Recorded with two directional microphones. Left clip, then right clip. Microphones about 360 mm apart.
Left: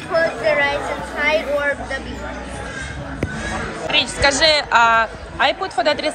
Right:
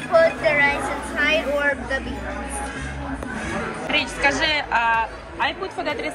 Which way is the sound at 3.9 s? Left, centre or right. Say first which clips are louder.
Left 4 dB; centre.